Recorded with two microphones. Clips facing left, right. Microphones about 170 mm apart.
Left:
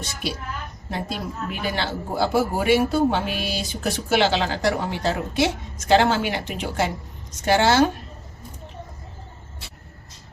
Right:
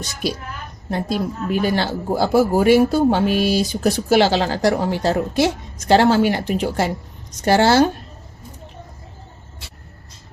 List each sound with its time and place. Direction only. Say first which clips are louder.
0.0 s a woman's voice: right 5 dB; 40° right (ahead or behind)